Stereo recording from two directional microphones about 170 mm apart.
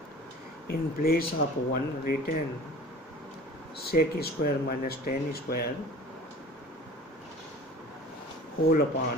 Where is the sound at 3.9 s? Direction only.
65° left (ahead or behind).